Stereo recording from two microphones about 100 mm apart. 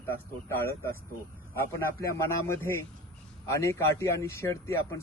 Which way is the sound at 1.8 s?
25° left (ahead or behind).